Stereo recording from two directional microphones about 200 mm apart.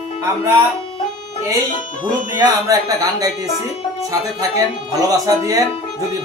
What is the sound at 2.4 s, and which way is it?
Speech, 15° right (ahead or behind).